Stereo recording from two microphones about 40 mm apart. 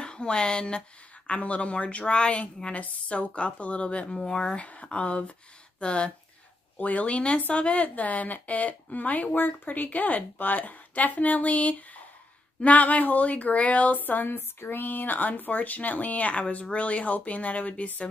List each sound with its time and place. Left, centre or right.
0.0 s a woman's voice: left
1.3 s a woman's voice: left
6.8 s a woman's voice: left